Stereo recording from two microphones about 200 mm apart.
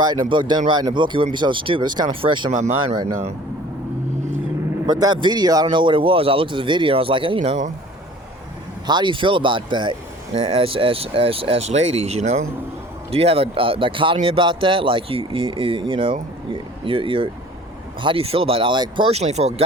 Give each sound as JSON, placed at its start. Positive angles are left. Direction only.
{"t": 0.0, "sound": "speech", "side_deg": -20}
{"t": 4.9, "sound": "speech", "side_deg": -20}
{"t": 8.9, "sound": "speech", "side_deg": -25}